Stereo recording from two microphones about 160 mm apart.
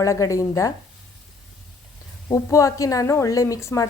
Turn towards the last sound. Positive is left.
turn(degrees=20)  # may be behind; listen again after turning